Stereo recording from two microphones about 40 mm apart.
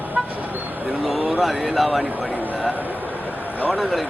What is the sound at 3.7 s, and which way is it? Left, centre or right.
Speech, centre.